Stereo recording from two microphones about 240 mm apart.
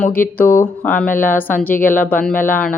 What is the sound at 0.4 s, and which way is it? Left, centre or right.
Speech, left.